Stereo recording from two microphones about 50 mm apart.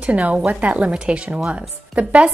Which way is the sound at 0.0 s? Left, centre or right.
Right.